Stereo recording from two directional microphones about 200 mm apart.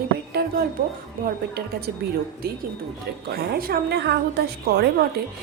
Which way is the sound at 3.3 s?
50° right (ahead or behind).